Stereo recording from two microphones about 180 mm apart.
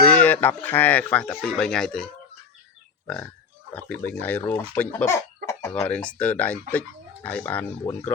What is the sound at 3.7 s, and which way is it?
Speech, 10° left (ahead or behind).